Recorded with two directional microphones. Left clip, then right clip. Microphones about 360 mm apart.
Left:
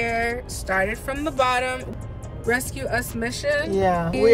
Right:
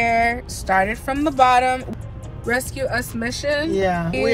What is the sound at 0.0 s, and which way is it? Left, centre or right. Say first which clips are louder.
Speech: right 6 dB; centre.